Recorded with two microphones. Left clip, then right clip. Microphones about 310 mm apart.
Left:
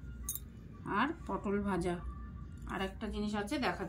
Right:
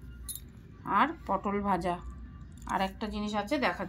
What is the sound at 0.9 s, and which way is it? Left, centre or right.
Speech, centre.